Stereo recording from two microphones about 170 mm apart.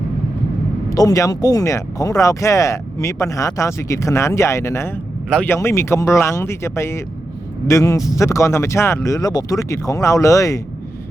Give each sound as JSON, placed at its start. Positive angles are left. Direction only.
{"t": 0.9, "sound": "speech", "side_deg": 20}